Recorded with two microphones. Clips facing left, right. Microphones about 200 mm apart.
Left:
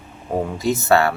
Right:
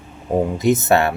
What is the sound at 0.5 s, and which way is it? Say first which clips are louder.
Speech: even; 20° right (ahead or behind).